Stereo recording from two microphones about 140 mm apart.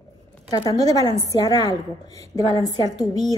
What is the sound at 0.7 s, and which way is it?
Speech, 25° left (ahead or behind).